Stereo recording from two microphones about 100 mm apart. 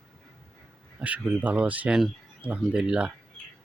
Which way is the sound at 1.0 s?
15° right (ahead or behind).